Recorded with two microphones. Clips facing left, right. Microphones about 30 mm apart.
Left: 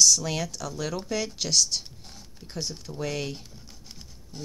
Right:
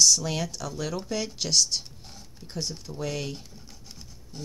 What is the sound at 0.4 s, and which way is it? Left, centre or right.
Speech, centre.